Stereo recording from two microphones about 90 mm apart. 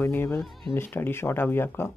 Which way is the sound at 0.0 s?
30° left (ahead or behind).